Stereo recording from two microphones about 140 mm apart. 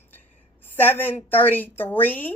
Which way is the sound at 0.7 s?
15° left (ahead or behind).